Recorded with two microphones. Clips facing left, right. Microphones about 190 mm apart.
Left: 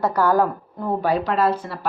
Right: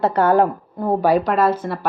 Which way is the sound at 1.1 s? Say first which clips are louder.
Right 3 dB; 45° right (ahead or behind).